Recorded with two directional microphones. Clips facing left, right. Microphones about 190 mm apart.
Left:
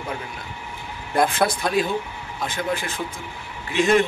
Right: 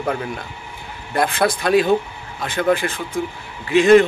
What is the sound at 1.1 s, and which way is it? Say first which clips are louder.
Speech: right 1 dB; centre (ahead or behind).